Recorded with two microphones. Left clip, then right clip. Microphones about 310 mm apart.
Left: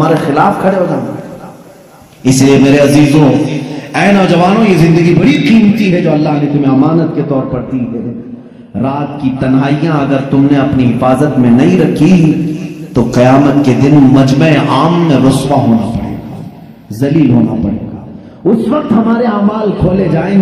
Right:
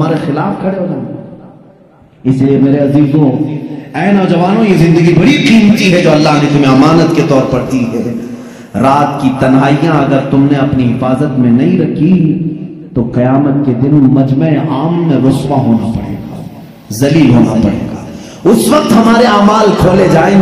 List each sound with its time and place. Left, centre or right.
0.0 s a man's voice: centre
2.2 s a man's voice: left; by 7.8 s right
8.7 s a man's voice: right; by 12.0 s left
12.9 s a man's voice: left; by 16.0 s centre
17.0 s speech: centre
17.5 s a man's voice: right
18.4 s a man's voice: right
19.5 s a man's voice: right